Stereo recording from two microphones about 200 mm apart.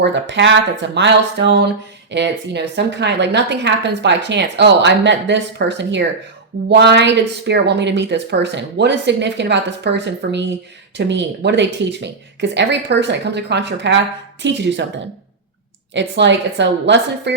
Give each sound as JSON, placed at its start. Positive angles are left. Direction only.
{"t": 0.0, "sound": "speech", "side_deg": -60}
{"t": 15.9, "sound": "speech", "side_deg": -60}